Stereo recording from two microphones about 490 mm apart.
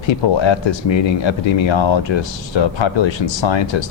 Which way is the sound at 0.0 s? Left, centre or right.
Left.